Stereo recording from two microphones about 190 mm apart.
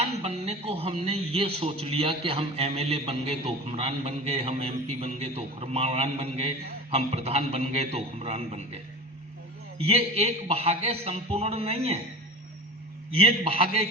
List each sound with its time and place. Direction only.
0.0 s a man's voice: 30° right (ahead or behind)
13.1 s a man's voice: 30° right (ahead or behind)